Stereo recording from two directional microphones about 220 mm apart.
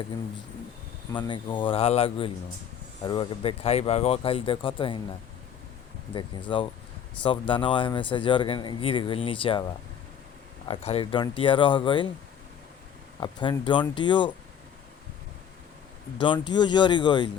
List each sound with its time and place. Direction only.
1.1 s speech: 20° left (ahead or behind)
6.1 s speech: 20° left (ahead or behind)
10.7 s speech: 25° left (ahead or behind)
13.1 s speech: 20° left (ahead or behind)
16.1 s speech: 20° left (ahead or behind)